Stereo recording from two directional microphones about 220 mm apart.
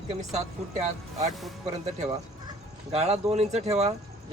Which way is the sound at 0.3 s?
30° right (ahead or behind).